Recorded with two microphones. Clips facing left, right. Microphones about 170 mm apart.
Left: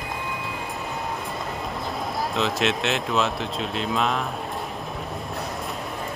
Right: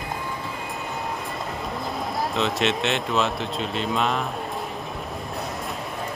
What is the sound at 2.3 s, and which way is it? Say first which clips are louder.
Speech: even; centre (ahead or behind).